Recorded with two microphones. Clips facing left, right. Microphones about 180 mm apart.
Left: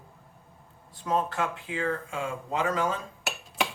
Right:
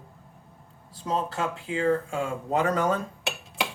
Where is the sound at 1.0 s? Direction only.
30° right (ahead or behind).